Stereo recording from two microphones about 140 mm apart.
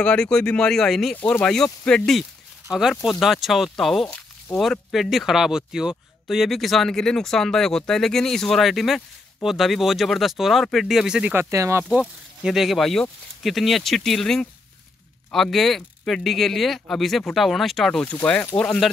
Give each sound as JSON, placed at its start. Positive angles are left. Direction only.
{"t": 0.0, "sound": "speech", "side_deg": 5}
{"t": 11.3, "sound": "speech", "side_deg": -20}
{"t": 11.9, "sound": "speech", "side_deg": -5}